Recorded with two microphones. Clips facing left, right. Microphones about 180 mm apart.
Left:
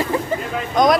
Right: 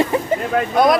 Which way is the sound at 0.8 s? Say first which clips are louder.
Even; 10° right (ahead or behind).